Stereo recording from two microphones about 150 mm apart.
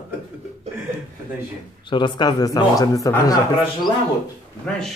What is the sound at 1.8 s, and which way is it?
A man's voice, 30° left (ahead or behind).